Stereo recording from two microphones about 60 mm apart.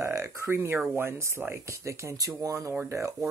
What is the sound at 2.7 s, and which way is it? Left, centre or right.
Speech, right.